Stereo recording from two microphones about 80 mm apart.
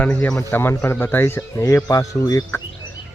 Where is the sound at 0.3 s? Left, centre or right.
Left.